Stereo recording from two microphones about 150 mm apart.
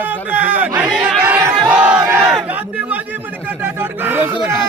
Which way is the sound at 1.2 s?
10° right (ahead or behind).